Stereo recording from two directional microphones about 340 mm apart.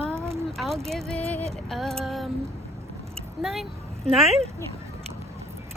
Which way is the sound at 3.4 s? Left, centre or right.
Centre.